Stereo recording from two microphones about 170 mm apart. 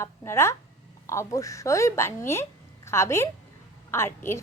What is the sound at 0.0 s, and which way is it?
Speech, 15° left (ahead or behind).